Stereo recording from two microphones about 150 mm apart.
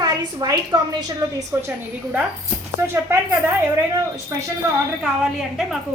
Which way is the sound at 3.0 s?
15° right (ahead or behind).